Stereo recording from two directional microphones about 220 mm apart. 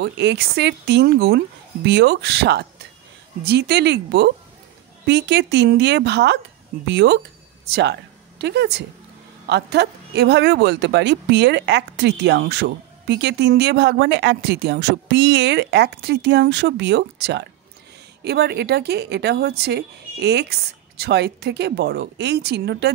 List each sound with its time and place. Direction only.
0.0 s speech: 50° right (ahead or behind)